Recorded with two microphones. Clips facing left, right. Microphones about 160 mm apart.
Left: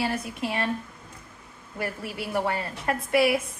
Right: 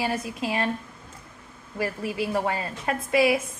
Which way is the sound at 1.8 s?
20° right (ahead or behind).